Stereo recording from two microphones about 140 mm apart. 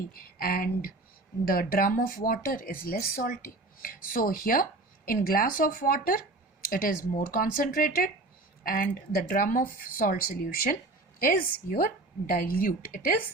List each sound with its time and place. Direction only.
0.1 s speech: 90° left